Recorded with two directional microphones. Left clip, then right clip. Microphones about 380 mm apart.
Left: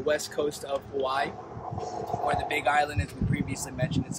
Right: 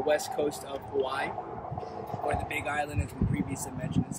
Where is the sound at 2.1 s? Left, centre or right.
Right.